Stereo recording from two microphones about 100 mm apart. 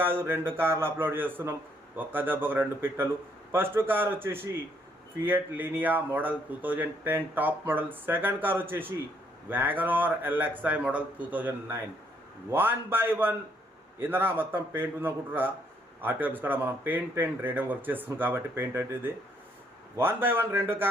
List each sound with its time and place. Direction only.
0.0 s a man's voice: 25° right (ahead or behind)